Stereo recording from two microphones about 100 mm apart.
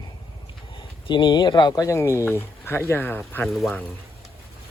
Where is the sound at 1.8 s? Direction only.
30° left (ahead or behind).